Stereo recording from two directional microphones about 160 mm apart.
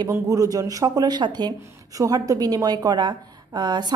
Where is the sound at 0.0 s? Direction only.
20° right (ahead or behind).